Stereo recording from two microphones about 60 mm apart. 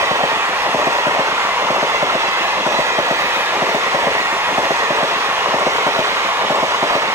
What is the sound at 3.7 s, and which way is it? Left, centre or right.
Train, right.